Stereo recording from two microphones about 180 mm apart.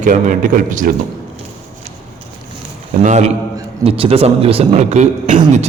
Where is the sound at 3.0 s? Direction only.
40° right (ahead or behind).